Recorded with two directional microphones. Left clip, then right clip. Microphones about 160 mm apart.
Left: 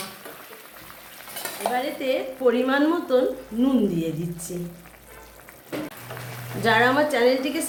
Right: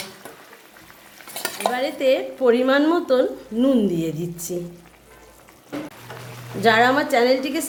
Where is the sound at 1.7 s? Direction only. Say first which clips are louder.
Right 6 dB; 75° right (ahead or behind).